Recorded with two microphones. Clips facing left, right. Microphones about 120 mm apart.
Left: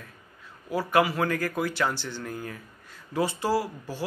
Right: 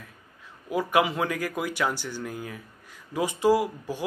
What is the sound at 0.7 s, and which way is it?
Speech, 15° right (ahead or behind).